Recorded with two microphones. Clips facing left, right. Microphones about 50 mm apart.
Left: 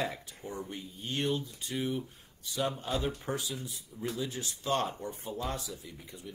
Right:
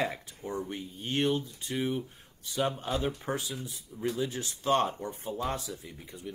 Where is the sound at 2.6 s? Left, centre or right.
Centre.